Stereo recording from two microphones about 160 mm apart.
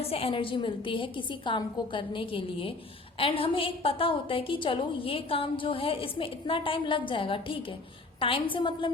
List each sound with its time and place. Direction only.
0.0 s a woman's voice: 40° left (ahead or behind)